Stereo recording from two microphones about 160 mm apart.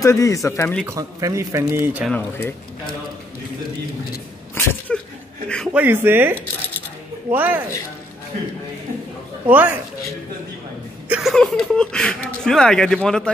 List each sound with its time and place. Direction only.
0.0 s speech: 20° left (ahead or behind)
0.8 s speech: 20° right (ahead or behind)
2.0 s speech: 10° left (ahead or behind)
4.6 s speech: 10° left (ahead or behind)
5.7 s speech: 10° right (ahead or behind)
7.3 s speech: 10° right (ahead or behind)
9.5 s speech: 10° right (ahead or behind)
11.1 s speech: 5° right (ahead or behind)